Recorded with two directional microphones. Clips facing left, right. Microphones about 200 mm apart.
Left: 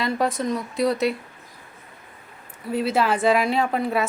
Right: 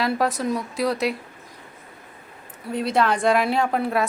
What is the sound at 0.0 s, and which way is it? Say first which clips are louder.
A woman's voice: right 1 dB; centre (ahead or behind).